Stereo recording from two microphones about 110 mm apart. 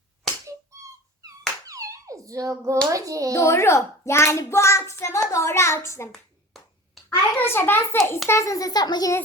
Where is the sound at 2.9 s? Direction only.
30° right (ahead or behind).